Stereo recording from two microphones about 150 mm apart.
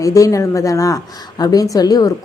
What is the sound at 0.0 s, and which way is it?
A woman's voice, 20° left (ahead or behind).